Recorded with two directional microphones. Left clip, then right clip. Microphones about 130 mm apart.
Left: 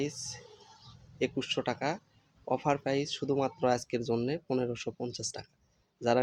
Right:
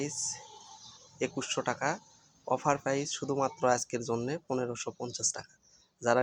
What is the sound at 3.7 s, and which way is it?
Chopping, 65° left (ahead or behind).